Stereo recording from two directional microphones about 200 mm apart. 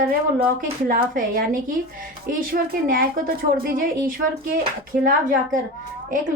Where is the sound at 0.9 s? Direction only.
45° right (ahead or behind).